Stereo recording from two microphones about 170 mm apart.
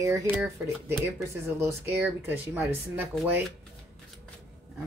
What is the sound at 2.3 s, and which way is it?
Speech, 10° right (ahead or behind).